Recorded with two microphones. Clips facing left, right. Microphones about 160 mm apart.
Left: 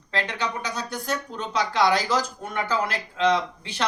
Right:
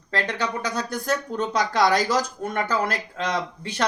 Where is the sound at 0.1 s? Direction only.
45° right (ahead or behind).